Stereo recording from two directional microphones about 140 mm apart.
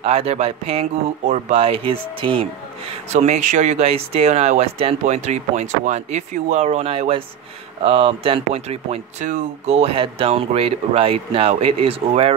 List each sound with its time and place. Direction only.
0.0 s speech: 45° right (ahead or behind)
2.9 s speech: 50° right (ahead or behind)